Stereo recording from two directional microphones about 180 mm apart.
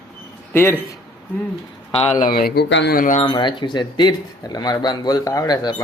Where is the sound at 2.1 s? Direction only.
50° left (ahead or behind); by 3.0 s 80° left.